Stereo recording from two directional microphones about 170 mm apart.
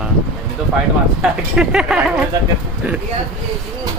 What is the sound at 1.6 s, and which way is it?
Speech, 5° right (ahead or behind).